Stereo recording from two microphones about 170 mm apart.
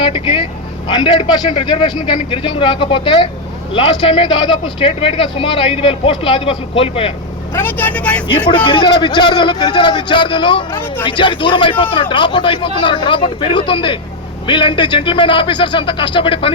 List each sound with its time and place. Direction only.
0.0 s a man's voice: 30° left (ahead or behind)
7.5 s speech: 10° left (ahead or behind)
8.6 s a man's voice: 30° left (ahead or behind)